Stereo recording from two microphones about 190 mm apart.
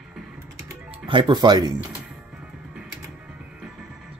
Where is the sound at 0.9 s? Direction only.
25° right (ahead or behind).